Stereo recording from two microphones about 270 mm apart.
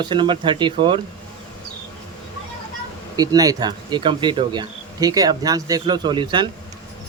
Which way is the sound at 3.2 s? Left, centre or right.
Centre.